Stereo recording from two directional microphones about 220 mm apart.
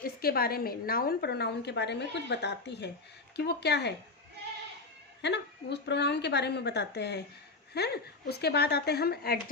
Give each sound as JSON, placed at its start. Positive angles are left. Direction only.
{"t": 0.0, "sound": "a woman's voice", "side_deg": 45}
{"t": 5.2, "sound": "a woman's voice", "side_deg": 50}